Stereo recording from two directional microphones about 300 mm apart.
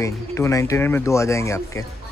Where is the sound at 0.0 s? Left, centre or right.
Centre.